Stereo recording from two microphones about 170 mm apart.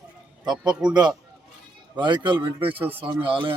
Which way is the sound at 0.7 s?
5° right (ahead or behind).